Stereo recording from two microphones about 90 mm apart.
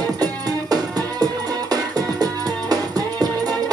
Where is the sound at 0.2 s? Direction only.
45° right (ahead or behind).